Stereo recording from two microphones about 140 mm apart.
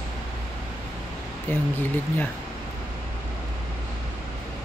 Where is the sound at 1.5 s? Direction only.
15° left (ahead or behind).